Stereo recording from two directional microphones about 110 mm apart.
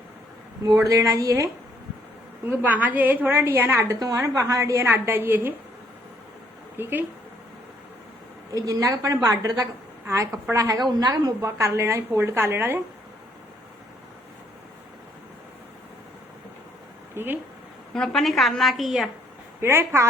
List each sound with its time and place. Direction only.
0.8 s a woman's voice: 30° right (ahead or behind)
2.4 s a woman's voice: 20° right (ahead or behind)
6.7 s a woman's voice: 20° right (ahead or behind)
8.5 s a woman's voice: 30° right (ahead or behind)
17.2 s speech: 20° right (ahead or behind)
17.9 s a woman's voice: 5° left (ahead or behind)
19.6 s a woman's voice: 20° right (ahead or behind)